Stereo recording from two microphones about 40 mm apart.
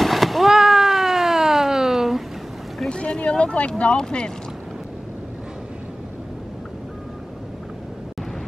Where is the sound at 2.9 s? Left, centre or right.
Left.